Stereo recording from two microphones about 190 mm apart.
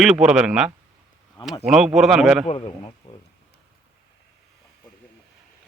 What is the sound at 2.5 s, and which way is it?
Speech, 35° left (ahead or behind).